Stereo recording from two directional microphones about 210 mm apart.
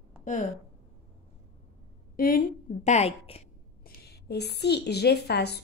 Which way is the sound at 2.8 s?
30° left (ahead or behind).